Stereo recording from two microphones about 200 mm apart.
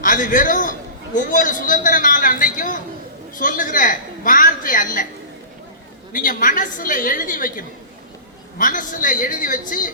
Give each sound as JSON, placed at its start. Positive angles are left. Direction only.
{"t": 0.0, "sound": "a man's voice", "side_deg": 40}
{"t": 6.1, "sound": "a man's voice", "side_deg": 40}